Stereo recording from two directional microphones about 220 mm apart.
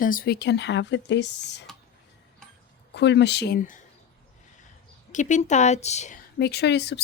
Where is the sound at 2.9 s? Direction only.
50° left (ahead or behind).